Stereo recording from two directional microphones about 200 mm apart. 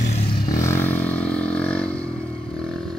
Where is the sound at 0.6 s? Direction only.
10° left (ahead or behind).